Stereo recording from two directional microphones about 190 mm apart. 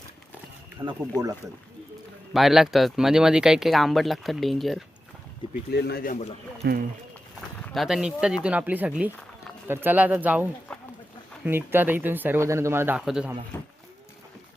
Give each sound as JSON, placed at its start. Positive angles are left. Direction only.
{"t": 0.8, "sound": "speech", "side_deg": -20}
{"t": 2.3, "sound": "speech", "side_deg": 0}
{"t": 5.7, "sound": "speech", "side_deg": 55}
{"t": 6.6, "sound": "speech", "side_deg": -60}
{"t": 7.6, "sound": "speech", "side_deg": 0}
{"t": 10.7, "sound": "a sound", "side_deg": 5}
{"t": 11.4, "sound": "speech", "side_deg": -10}
{"t": 13.5, "sound": "cattle", "side_deg": 10}